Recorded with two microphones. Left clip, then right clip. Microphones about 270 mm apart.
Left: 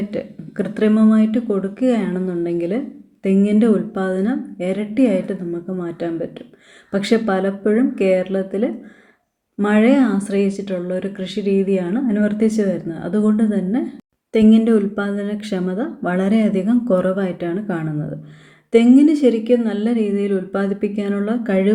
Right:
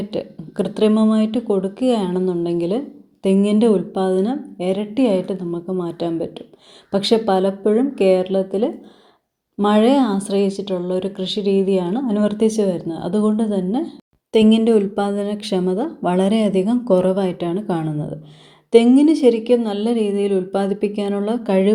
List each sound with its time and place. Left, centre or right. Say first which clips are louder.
0.5 s a woman's voice: right 1 dB; centre